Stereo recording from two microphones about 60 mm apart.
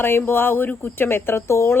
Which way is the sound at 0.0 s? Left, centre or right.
Left.